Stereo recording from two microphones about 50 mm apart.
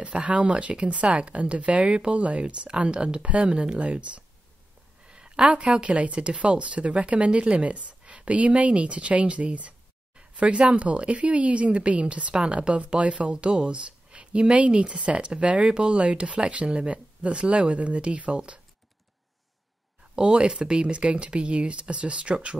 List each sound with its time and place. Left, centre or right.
0.0 s speech: right
20.2 s speech: centre